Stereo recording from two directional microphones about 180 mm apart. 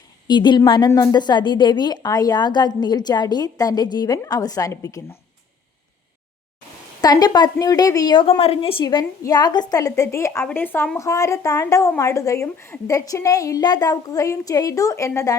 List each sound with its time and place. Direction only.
0.3 s a woman's voice: 25° left (ahead or behind)
7.0 s a woman's voice: 20° left (ahead or behind)